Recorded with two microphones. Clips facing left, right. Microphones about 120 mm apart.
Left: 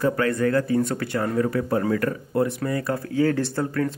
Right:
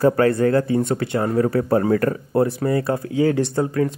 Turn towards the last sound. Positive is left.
turn(degrees=-20)  # may be behind; listen again after turning